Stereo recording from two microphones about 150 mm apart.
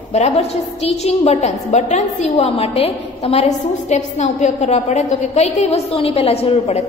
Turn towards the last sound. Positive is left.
turn(degrees=45)  # may be behind; listen again after turning